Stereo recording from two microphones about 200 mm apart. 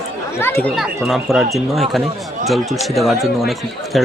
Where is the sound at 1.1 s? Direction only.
Centre (ahead or behind).